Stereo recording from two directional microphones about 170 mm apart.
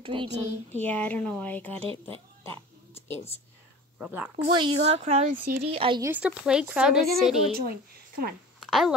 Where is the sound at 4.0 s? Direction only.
10° right (ahead or behind).